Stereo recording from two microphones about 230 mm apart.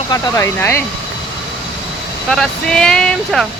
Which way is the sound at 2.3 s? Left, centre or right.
Centre.